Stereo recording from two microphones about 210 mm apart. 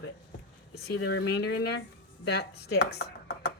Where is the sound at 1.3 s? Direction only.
55° left (ahead or behind).